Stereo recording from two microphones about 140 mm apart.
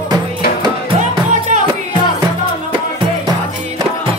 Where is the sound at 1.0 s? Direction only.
60° right (ahead or behind).